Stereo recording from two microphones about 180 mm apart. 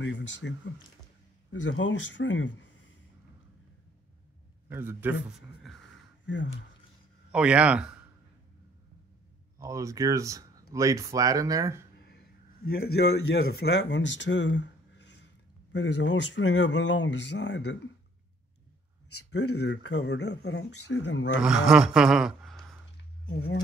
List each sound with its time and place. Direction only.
0.0 s speech: 90° left
4.6 s speech: 10° right (ahead or behind)
6.2 s speech: 85° left
7.3 s a man's voice: 5° right (ahead or behind)
9.6 s speech: 15° right (ahead or behind)
12.0 s speech: 60° left (ahead or behind); by 15.2 s 75° left (ahead or behind)
15.7 s speech: 90° left; by 17.7 s 70° left (ahead or behind)
19.3 s speech: 70° left (ahead or behind)
21.4 s speech: 5° right (ahead or behind)